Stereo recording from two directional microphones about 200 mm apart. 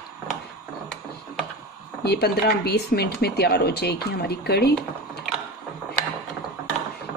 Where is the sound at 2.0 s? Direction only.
55° left (ahead or behind).